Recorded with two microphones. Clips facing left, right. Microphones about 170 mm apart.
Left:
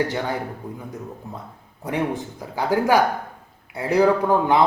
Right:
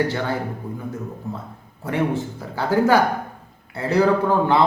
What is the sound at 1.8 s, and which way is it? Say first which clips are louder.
A man's voice: right 2 dB; 15° left (ahead or behind).